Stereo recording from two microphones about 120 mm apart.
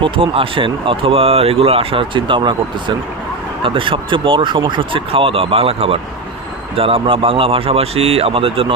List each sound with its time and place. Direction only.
0.0 s speech: 45° right (ahead or behind)